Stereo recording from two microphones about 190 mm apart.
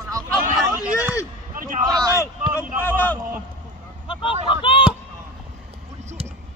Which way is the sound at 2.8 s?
10° left (ahead or behind).